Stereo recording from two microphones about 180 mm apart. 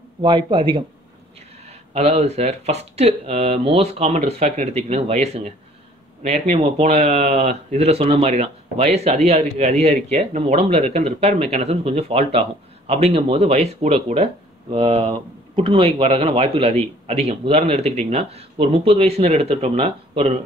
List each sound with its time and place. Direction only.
0.2 s speech: 25° right (ahead or behind)